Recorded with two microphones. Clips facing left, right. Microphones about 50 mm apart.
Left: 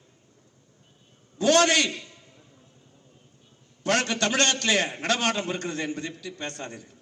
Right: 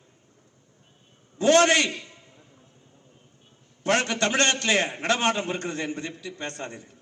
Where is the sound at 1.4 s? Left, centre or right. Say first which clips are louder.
Right 2 dB; right.